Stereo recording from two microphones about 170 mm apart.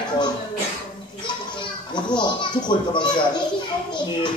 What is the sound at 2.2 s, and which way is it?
A child's voice, 25° left (ahead or behind).